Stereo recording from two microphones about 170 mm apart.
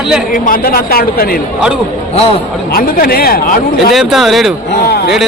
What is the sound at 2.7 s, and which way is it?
Speech, 60° left (ahead or behind).